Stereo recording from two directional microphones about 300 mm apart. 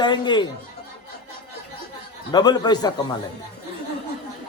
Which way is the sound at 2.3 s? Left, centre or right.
Centre.